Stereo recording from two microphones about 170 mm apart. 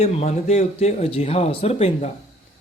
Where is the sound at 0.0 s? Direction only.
40° left (ahead or behind).